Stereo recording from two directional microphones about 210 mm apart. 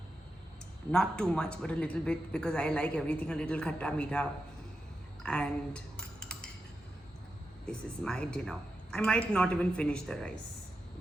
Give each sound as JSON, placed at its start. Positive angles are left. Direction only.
{"t": 0.9, "sound": "speech", "side_deg": 5}
{"t": 5.2, "sound": "cutlery", "side_deg": 5}
{"t": 7.7, "sound": "speech", "side_deg": 5}